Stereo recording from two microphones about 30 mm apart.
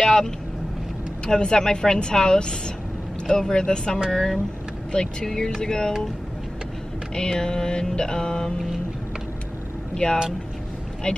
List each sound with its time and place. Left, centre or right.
0.0 s vehicle: left
1.2 s mantra: left
4.1 s speech: centre
4.9 s mantra: left
7.2 s mantra: left
10.0 s speech: left
11.1 s mantra: left